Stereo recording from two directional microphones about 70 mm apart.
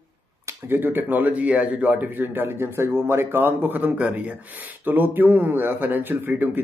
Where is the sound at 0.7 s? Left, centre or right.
Right.